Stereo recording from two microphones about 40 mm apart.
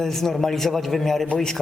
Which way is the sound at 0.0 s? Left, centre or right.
Centre.